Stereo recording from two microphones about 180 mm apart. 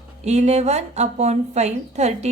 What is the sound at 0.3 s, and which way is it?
A woman's voice, 35° right (ahead or behind).